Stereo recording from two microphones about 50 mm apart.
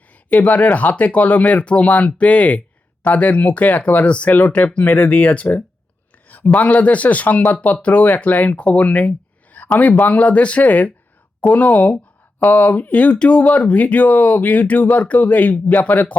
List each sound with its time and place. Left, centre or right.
0.3 s speech: left
4.3 s speech: left